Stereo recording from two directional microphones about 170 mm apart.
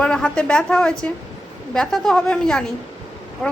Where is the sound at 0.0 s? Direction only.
5° left (ahead or behind).